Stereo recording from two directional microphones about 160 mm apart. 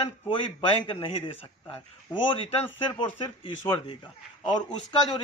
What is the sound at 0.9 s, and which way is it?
Speech, 40° left (ahead or behind).